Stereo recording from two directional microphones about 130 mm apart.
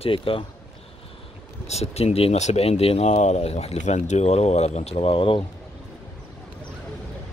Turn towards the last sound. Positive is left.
turn(degrees=40)  # may be behind; listen again after turning